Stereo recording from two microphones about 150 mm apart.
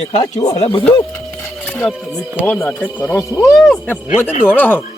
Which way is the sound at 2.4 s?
10° left (ahead or behind).